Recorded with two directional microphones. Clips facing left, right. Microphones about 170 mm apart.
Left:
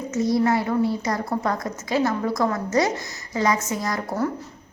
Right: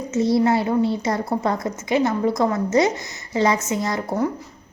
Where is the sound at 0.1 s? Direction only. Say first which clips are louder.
Right 3 dB; 25° right (ahead or behind).